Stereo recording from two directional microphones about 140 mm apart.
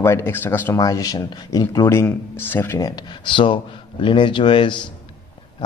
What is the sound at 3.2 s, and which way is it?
A man's voice, 35° left (ahead or behind).